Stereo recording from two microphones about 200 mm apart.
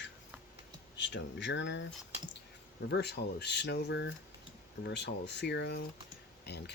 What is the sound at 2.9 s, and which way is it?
Speech, 55° left (ahead or behind).